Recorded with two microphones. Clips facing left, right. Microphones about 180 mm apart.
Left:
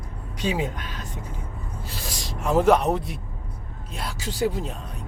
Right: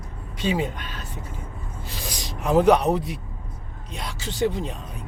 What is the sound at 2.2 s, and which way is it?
Speech, centre (ahead or behind).